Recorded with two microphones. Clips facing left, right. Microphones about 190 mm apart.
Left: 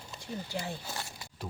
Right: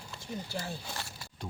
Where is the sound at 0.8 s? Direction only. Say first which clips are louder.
Left 1 dB; 5° left (ahead or behind).